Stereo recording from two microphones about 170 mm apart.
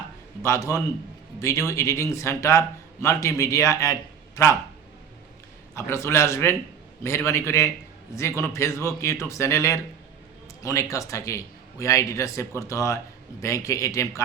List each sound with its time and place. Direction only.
0.4 s a man's voice: 20° left (ahead or behind)
5.7 s a man's voice: 15° left (ahead or behind)